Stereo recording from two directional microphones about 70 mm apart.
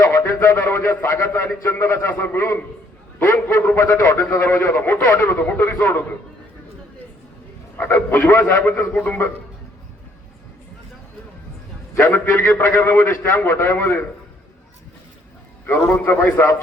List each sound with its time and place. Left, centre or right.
0.1 s a man's voice: left
4.3 s a man's voice: left
7.8 s a man's voice: left
11.9 s a man's voice: left
15.6 s a man's voice: left